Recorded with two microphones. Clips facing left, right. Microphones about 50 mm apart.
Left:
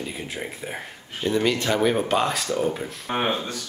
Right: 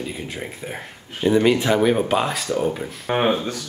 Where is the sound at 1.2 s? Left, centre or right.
Centre.